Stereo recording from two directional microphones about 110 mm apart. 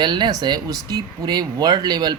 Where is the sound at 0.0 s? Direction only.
45° right (ahead or behind).